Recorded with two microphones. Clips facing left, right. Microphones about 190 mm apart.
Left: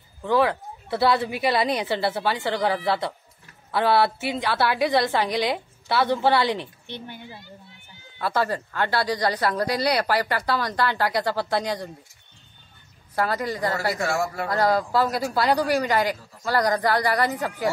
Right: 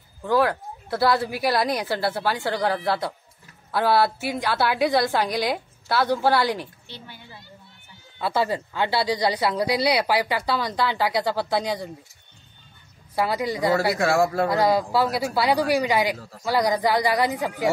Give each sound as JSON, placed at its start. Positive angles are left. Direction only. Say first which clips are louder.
{"t": 0.2, "sound": "a woman's voice", "louder": "even", "side_deg": -5}
{"t": 8.2, "sound": "speech", "louder": "right 1 dB", "side_deg": -10}
{"t": 13.1, "sound": "speech", "louder": "right 1 dB", "side_deg": -10}
{"t": 13.9, "sound": "speech", "louder": "right 5 dB", "side_deg": -65}
{"t": 14.5, "sound": "speech", "louder": "right 1 dB", "side_deg": -15}